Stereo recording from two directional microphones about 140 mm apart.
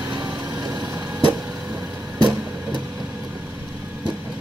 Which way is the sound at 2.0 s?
30° right (ahead or behind).